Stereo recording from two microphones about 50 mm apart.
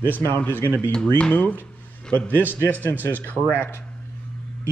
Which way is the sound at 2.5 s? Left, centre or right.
Right.